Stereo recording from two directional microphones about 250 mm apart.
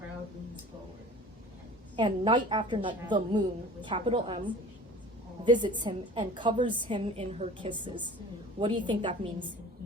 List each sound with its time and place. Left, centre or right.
2.0 s a woman's voice: centre